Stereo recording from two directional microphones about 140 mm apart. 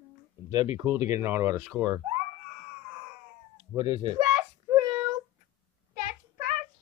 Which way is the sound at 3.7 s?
30° right (ahead or behind).